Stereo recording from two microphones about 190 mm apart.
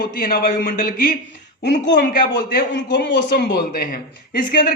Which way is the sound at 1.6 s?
60° left (ahead or behind).